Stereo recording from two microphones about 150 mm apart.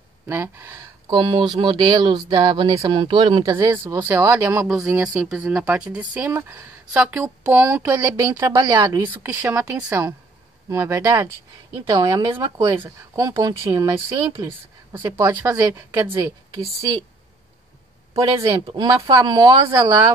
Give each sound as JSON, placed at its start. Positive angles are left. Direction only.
{"t": 0.3, "sound": "a woman's voice", "side_deg": -15}
{"t": 1.1, "sound": "speech", "side_deg": -30}
{"t": 3.5, "sound": "a woman's voice", "side_deg": -20}
{"t": 4.6, "sound": "a woman's voice", "side_deg": -5}
{"t": 12.3, "sound": "speech", "side_deg": -35}
{"t": 12.8, "sound": "speech", "side_deg": -20}
{"t": 18.1, "sound": "speech", "side_deg": -40}
{"t": 18.9, "sound": "speech", "side_deg": -25}